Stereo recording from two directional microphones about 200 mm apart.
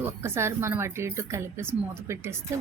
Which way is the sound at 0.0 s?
15° right (ahead or behind).